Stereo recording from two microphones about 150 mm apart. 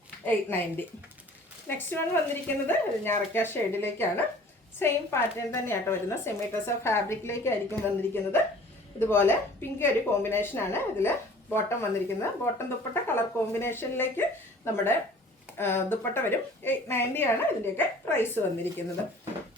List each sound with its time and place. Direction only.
0.3 s a woman's voice: 15° left (ahead or behind)